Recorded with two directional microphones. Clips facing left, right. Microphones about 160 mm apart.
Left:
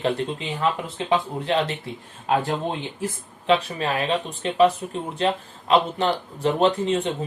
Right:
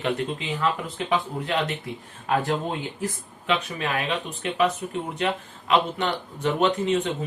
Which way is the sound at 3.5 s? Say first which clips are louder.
Left 5 dB; 30° left (ahead or behind).